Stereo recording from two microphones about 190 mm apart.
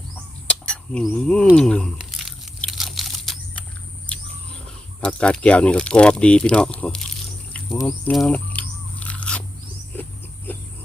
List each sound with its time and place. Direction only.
0.4 s a sound: 5° left (ahead or behind)
1.5 s crunch: 5° left (ahead or behind)
4.9 s speech: 5° left (ahead or behind)
7.8 s speech: 15° left (ahead or behind)
8.1 s biting: 5° left (ahead or behind)
9.9 s a sound: 10° left (ahead or behind)